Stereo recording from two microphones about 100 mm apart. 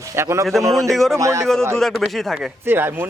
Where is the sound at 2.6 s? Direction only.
20° right (ahead or behind).